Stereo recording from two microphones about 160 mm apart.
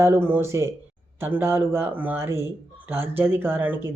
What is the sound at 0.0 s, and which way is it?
Speech, 15° right (ahead or behind).